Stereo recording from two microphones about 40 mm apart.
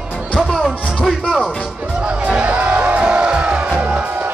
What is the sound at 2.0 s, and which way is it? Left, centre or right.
Music, right.